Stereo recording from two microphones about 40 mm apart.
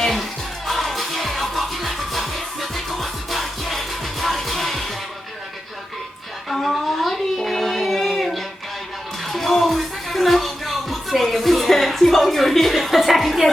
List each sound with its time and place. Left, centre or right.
0.0 s music: centre
6.5 s a sound: centre
9.3 s music: centre